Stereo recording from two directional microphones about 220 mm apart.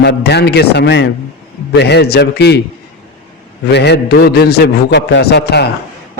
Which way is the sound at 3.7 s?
50° left (ahead or behind).